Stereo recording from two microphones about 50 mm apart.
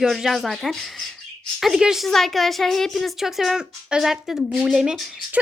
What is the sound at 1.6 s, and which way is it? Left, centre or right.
Speech, centre.